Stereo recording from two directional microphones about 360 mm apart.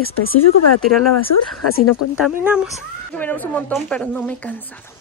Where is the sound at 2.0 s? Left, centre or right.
Left.